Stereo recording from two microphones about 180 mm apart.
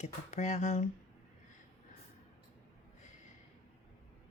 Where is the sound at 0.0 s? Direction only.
40° left (ahead or behind).